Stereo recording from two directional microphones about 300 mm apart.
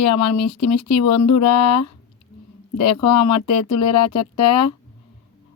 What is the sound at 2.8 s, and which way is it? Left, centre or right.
Speech, left.